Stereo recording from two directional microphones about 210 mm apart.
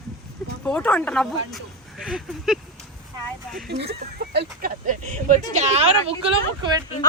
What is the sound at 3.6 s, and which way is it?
Speech, 50° right (ahead or behind).